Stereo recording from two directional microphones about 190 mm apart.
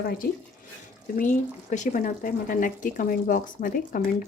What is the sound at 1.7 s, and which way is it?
Speech, 40° left (ahead or behind).